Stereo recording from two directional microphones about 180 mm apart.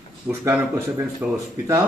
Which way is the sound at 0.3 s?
15° right (ahead or behind).